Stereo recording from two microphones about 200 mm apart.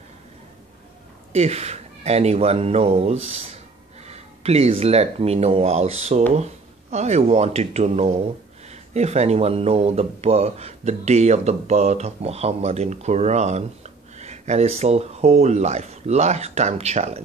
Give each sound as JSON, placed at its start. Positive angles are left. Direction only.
{"t": 1.3, "sound": "speech", "side_deg": -35}